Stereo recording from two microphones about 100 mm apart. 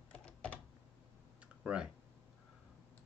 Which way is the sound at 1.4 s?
10° right (ahead or behind).